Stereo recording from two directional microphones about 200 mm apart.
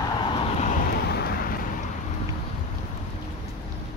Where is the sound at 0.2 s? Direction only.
30° left (ahead or behind).